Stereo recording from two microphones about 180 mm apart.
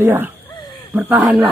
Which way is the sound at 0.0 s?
10° right (ahead or behind).